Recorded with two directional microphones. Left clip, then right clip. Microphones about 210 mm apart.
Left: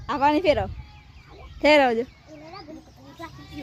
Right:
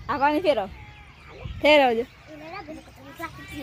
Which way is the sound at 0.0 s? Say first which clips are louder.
Left 1 dB; 15° left (ahead or behind).